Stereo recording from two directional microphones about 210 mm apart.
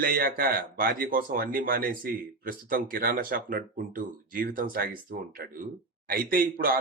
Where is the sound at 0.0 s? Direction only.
45° right (ahead or behind).